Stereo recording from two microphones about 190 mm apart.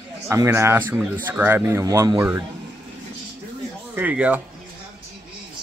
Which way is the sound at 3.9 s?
10° right (ahead or behind).